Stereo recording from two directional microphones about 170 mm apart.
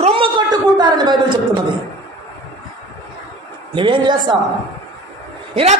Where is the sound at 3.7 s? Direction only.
30° right (ahead or behind).